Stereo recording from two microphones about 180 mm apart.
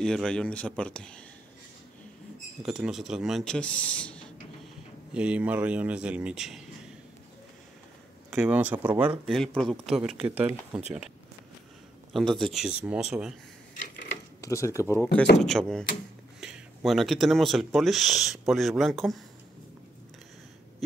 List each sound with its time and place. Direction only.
0.0 s speech: 5° left (ahead or behind)
2.6 s speech: centre (ahead or behind)
5.1 s speech: 5° right (ahead or behind)
8.3 s speech: 5° right (ahead or behind)
12.1 s speech: centre (ahead or behind)
14.4 s speech: 15° left (ahead or behind)
15.4 s speech: 5° left (ahead or behind)